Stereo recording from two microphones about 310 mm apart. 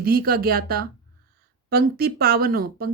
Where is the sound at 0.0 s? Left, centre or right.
Right.